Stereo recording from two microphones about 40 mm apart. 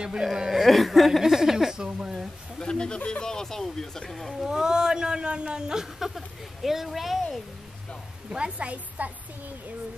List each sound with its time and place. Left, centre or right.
0.2 s speech: centre
0.7 s chuckle: centre
1.2 s a sound: centre
1.9 s speech: right
2.6 s speech: left
4.4 s speech: centre
8.3 s a woman's voice: right